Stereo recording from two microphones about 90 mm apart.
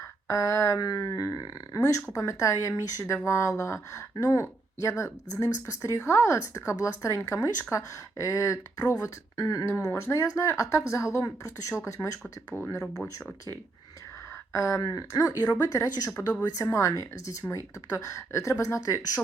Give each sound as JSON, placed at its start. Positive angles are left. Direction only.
{"t": 0.3, "sound": "speech", "side_deg": 35}
{"t": 9.6, "sound": "speech", "side_deg": 30}
{"t": 14.5, "sound": "speech", "side_deg": 35}